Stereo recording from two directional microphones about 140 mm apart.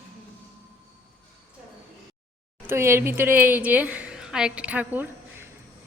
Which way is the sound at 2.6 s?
20° right (ahead or behind).